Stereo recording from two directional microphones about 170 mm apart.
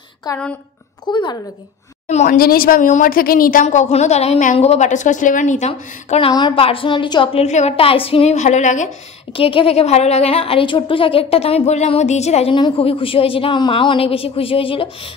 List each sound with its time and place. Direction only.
0.3 s a woman's voice: 20° left (ahead or behind)
2.0 s a woman's voice: 40° left (ahead or behind)
2.3 s a woman's voice: 60° left (ahead or behind); by 7.4 s 30° left (ahead or behind)
7.4 s a woman's voice: 40° left (ahead or behind)
9.3 s a woman's voice: 30° left (ahead or behind)